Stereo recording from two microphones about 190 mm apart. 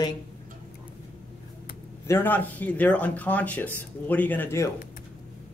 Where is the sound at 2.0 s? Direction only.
10° left (ahead or behind).